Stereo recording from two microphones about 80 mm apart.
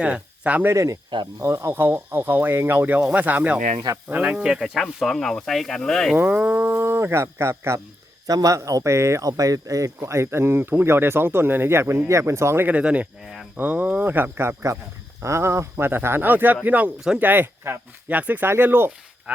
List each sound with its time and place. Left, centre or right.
0.0 s speech: centre
0.7 s speech: right; by 6.1 s centre
6.1 s speech: centre; by 7.8 s right
8.3 s speech: right
12.6 s speech: centre